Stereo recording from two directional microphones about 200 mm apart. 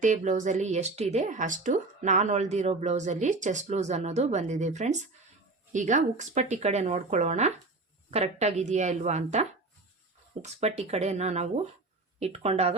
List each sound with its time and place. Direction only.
0.0 s a woman's voice: 40° right (ahead or behind)